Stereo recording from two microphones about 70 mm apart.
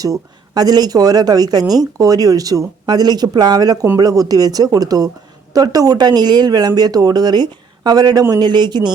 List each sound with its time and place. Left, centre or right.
0.0 s speech: right
8.3 s speech: right